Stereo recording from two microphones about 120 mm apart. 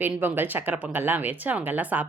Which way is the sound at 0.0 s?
15° right (ahead or behind).